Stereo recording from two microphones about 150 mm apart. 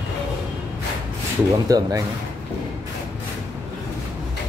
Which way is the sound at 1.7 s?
25° right (ahead or behind).